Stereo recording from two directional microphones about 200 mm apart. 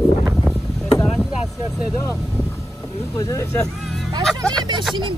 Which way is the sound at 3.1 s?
15° left (ahead or behind).